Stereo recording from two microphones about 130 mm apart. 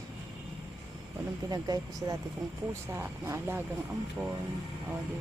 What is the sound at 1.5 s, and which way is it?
Speech, 30° right (ahead or behind).